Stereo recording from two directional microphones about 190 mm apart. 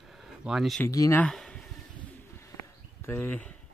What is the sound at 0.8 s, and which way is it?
Speech, 15° left (ahead or behind).